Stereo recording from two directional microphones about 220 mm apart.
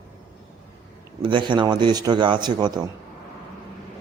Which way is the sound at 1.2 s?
20° right (ahead or behind).